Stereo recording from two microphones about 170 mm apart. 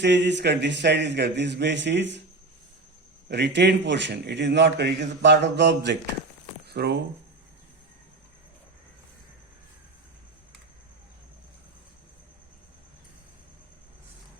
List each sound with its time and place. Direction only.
0.0 s a man's voice: 90° right
3.2 s a man's voice: 90° right
6.7 s speech: 70° right (ahead or behind)